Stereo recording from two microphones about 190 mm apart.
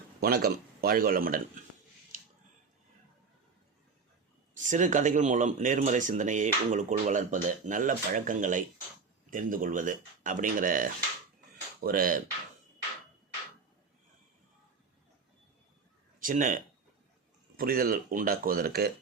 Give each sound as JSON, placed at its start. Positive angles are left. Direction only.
{"t": 0.2, "sound": "speech", "side_deg": -50}
{"t": 4.5, "sound": "speech", "side_deg": -40}
{"t": 16.2, "sound": "speech", "side_deg": -45}